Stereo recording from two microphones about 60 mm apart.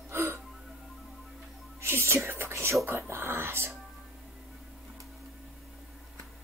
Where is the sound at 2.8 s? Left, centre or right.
Right.